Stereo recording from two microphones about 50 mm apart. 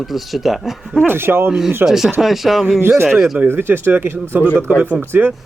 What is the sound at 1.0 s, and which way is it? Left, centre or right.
Speech, right.